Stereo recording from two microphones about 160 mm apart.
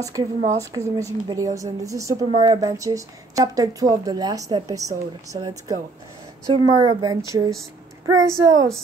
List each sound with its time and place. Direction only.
0.2 s a woman's voice: 25° right (ahead or behind)
6.5 s a woman's voice: 35° right (ahead or behind)
7.2 s a woman's voice: 20° right (ahead or behind)